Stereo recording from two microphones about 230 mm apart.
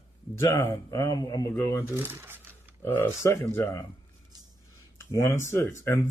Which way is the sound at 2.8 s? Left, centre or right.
Centre.